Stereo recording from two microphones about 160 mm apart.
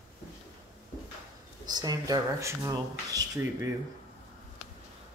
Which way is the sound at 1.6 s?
25° right (ahead or behind).